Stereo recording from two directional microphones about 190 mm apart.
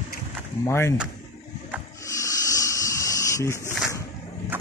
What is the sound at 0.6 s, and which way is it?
Speech, 15° left (ahead or behind).